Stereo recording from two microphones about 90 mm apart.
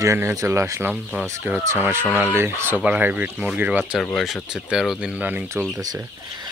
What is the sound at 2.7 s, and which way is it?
Speech, 15° right (ahead or behind).